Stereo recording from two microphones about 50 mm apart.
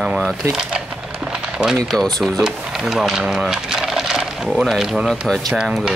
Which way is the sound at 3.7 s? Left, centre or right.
Centre.